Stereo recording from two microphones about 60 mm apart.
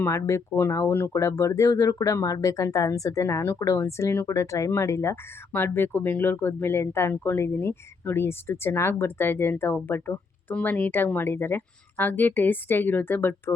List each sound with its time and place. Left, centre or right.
0.1 s speech: left
1.1 s speech: left
4.3 s speech: left
5.5 s a woman's voice: left